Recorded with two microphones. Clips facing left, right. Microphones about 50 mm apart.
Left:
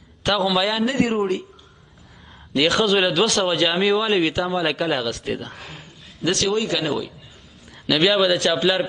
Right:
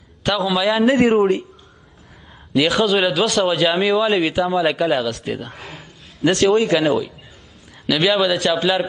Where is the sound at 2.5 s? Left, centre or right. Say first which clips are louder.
Right 2 dB; centre.